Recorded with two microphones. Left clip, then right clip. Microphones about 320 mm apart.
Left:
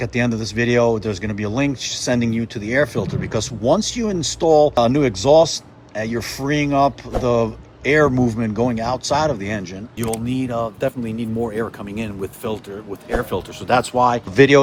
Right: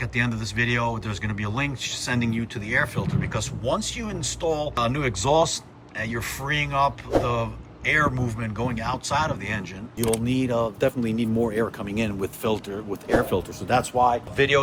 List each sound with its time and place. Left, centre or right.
0.0 s speech: centre
13.7 s speech: left
14.3 s speech: centre